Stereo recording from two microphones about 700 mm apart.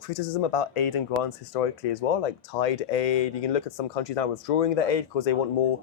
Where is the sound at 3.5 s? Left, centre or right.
Left.